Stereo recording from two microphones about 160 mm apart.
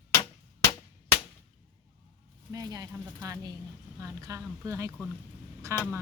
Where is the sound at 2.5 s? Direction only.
20° right (ahead or behind).